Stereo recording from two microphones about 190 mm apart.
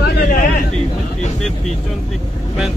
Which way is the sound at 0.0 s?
60° left (ahead or behind).